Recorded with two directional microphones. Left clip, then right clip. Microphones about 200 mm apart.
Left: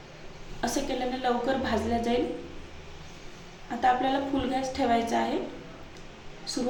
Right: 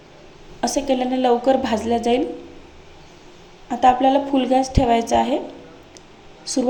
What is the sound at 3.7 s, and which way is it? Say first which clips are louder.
A woman's voice: right 10 dB; 35° right (ahead or behind).